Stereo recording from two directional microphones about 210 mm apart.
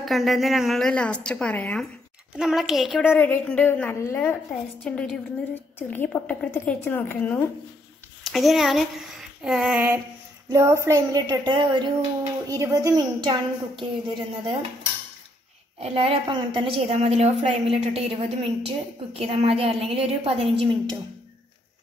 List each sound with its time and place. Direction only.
0.0 s a woman's voice: centre (ahead or behind)
8.3 s a woman's voice: centre (ahead or behind); by 14.6 s 25° right (ahead or behind)
15.8 s a woman's voice: 30° right (ahead or behind)